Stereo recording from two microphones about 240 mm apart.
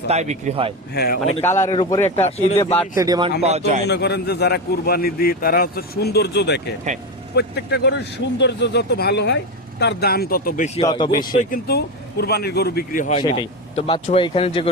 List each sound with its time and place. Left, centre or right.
0.1 s speech: right
0.9 s a man's voice: left
1.2 s a man's voice: centre
1.7 s speech: left
2.9 s speech: centre
3.8 s a man's voice: left
10.8 s speech: centre
11.3 s a man's voice: left
13.1 s speech: centre